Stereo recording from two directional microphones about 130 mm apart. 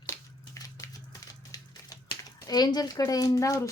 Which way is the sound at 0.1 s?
25° left (ahead or behind).